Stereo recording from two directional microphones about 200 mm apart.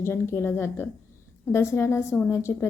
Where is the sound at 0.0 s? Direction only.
10° left (ahead or behind).